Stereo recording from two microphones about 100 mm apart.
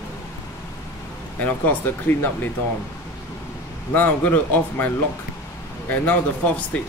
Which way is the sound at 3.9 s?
20° left (ahead or behind).